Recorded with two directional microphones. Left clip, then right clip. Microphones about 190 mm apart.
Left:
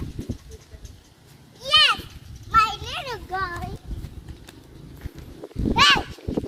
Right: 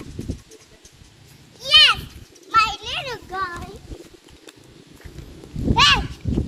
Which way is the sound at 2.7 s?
60° left (ahead or behind).